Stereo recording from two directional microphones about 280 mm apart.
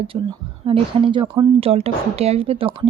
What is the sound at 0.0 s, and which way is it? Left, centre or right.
Speech, centre.